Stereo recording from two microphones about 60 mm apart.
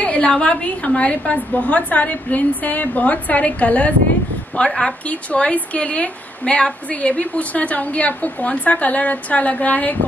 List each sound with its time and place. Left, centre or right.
0.0 s a woman's voice: left
4.6 s a woman's voice: centre